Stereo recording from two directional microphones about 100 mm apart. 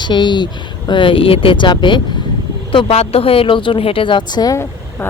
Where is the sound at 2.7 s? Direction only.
65° left (ahead or behind); by 4.5 s 45° left (ahead or behind).